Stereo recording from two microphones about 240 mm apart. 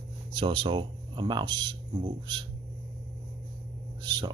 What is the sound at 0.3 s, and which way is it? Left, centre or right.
Speech, right.